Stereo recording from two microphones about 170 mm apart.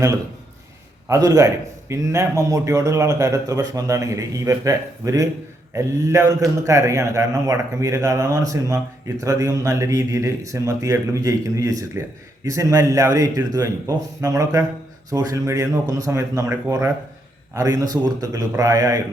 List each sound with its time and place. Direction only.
1.0 s a man's voice: 20° right (ahead or behind)